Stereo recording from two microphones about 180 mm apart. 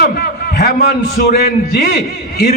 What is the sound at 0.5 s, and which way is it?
A man's voice, 60° left (ahead or behind).